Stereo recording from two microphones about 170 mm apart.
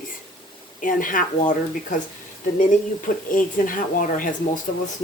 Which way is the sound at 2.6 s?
50° left (ahead or behind).